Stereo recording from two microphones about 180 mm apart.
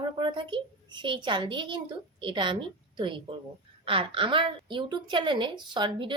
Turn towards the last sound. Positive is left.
turn(degrees=-25)  # may be behind; listen again after turning